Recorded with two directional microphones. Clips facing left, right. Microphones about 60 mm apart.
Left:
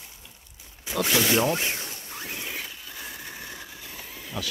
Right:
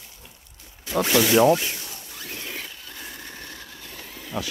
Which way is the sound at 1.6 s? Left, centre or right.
Left.